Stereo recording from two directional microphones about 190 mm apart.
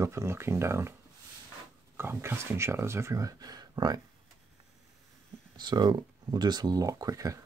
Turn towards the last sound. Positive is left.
turn(degrees=-15)  # may be behind; listen again after turning